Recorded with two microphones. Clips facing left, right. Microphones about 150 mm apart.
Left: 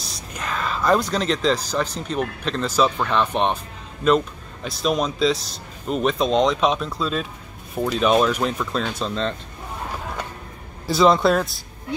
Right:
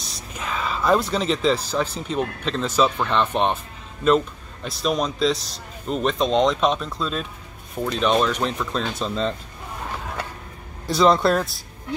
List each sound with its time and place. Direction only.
0.0 s a sound: centre (ahead or behind)
2.0 s a man's voice: centre (ahead or behind)
4.6 s a man's voice: centre (ahead or behind)
10.9 s a man's voice: centre (ahead or behind)